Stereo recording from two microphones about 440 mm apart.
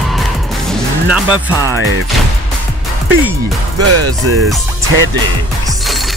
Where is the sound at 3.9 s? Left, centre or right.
Right.